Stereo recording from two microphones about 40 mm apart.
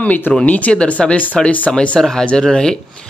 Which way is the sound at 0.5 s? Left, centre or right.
Left.